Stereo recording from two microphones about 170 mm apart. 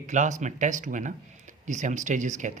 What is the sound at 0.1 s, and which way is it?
Speech, 45° right (ahead or behind).